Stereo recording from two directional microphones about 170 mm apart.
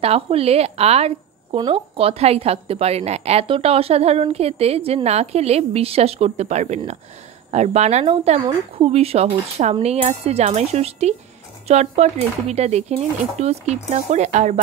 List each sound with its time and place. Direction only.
0.0 s a woman's voice: 35° right (ahead or behind)